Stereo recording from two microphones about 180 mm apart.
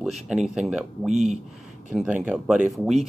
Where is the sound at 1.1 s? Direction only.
40° right (ahead or behind).